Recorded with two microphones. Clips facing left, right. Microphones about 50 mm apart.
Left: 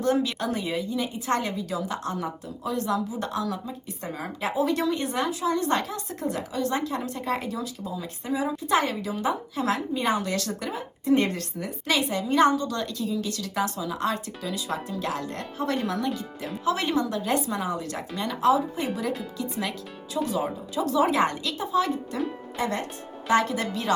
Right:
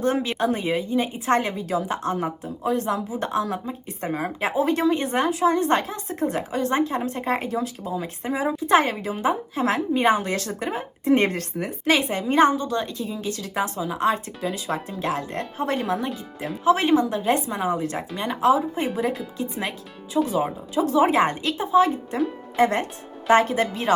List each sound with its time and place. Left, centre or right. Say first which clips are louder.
0.0 s a woman's voice: right 2 dB; right
16.6 s a woman's voice: right 7 dB; right
22.5 s speech: right 10 dB; right